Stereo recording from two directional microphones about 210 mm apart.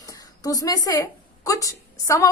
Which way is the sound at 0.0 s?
15° left (ahead or behind).